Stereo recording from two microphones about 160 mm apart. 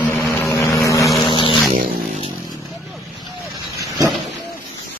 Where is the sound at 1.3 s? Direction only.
30° left (ahead or behind).